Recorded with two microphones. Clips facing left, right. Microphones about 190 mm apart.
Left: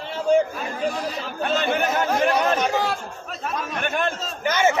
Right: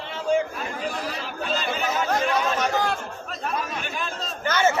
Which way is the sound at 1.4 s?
60° left (ahead or behind).